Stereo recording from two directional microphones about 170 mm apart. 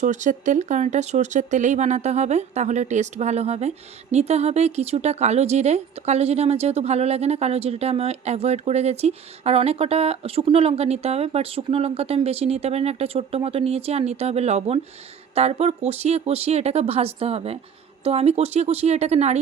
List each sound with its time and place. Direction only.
0.0 s speech: 45° right (ahead or behind)